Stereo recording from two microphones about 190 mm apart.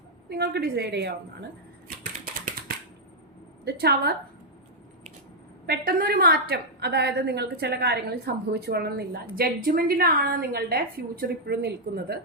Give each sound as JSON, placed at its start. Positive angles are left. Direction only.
{"t": 0.3, "sound": "a woman's voice", "side_deg": -60}
{"t": 3.6, "sound": "a woman's voice", "side_deg": -55}
{"t": 5.6, "sound": "a woman's voice", "side_deg": -55}